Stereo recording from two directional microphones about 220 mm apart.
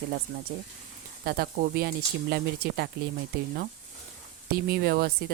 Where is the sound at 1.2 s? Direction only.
45° right (ahead or behind).